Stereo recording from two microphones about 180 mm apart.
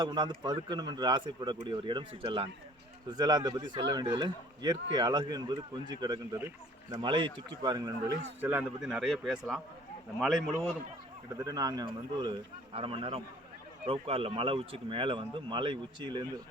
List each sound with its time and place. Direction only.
0.0 s speech: 25° right (ahead or behind)
8.4 s speech: 10° right (ahead or behind)
11.3 s speech: 20° right (ahead or behind)